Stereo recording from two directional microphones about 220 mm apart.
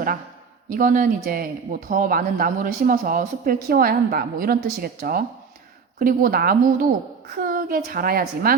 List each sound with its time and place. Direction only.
0.7 s speech: 40° right (ahead or behind)